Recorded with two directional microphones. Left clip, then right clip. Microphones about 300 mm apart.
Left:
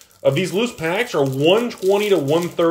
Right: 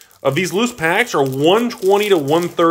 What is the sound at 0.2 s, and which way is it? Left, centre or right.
Speech, centre.